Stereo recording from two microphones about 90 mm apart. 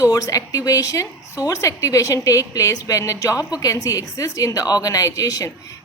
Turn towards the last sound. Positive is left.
turn(degrees=40)  # may be behind; listen again after turning